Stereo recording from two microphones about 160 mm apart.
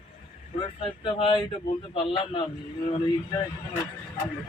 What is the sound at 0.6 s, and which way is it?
A man's voice, 30° left (ahead or behind).